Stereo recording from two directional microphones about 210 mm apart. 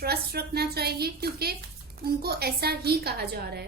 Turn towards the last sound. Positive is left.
turn(degrees=-50)  # may be behind; listen again after turning